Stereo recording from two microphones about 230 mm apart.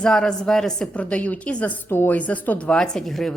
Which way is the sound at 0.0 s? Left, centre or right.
Centre.